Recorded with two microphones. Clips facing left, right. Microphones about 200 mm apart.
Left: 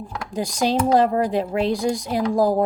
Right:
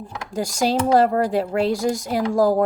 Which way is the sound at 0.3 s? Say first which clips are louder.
Even; 45° right (ahead or behind).